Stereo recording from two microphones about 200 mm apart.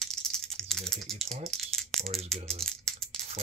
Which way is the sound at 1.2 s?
35° right (ahead or behind).